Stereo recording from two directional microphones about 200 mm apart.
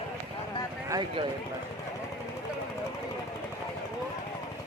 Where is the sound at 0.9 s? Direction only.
20° right (ahead or behind).